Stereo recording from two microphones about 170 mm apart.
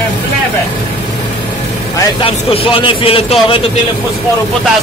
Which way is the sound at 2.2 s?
35° left (ahead or behind).